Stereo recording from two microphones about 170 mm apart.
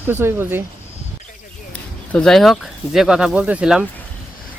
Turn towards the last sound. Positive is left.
turn(degrees=-5)  # may be behind; listen again after turning